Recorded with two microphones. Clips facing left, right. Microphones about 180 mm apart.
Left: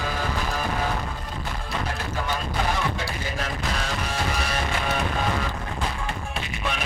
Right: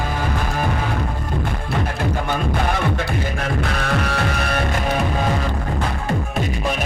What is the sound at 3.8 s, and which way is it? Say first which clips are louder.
Music: right 7 dB; 65° right (ahead or behind).